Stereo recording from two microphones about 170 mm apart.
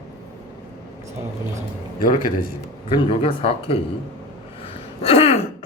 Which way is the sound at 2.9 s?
35° left (ahead or behind).